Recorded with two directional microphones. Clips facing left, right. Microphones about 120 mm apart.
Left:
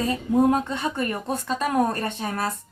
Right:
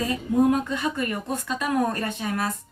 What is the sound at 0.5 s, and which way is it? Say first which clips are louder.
Speech: even; 30° left (ahead or behind).